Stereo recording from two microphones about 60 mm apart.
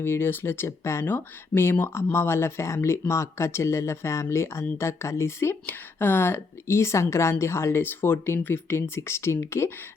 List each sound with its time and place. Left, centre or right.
0.0 s a woman's voice: left
5.6 s a woman's voice: left